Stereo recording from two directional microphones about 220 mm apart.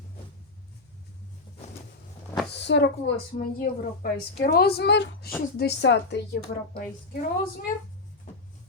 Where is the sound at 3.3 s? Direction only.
40° left (ahead or behind).